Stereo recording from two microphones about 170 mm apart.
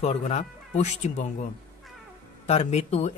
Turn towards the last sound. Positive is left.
turn(degrees=40)  # may be behind; listen again after turning